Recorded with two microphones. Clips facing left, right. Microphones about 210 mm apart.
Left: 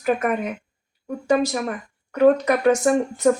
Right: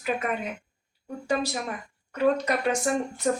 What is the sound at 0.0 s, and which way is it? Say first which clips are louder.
Speech: left 7 dB; 50° left (ahead or behind).